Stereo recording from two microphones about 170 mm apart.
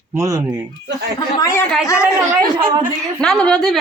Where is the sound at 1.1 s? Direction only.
15° left (ahead or behind).